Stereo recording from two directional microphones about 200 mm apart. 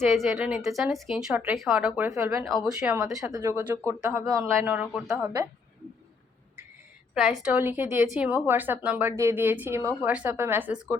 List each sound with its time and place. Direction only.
0.1 s a woman's voice: centre (ahead or behind)
2.0 s a woman's voice: 15° right (ahead or behind)
7.1 s a woman's voice: centre (ahead or behind)